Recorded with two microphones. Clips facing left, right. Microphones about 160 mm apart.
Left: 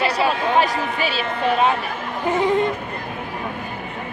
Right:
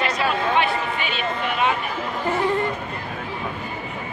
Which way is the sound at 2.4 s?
20° left (ahead or behind).